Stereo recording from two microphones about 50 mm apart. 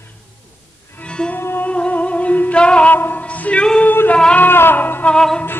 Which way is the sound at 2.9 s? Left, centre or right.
Left.